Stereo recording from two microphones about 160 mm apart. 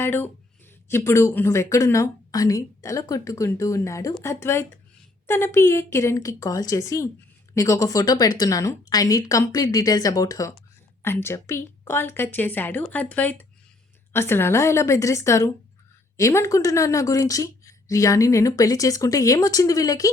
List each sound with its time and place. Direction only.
0.0 s a woman's voice: 15° left (ahead or behind)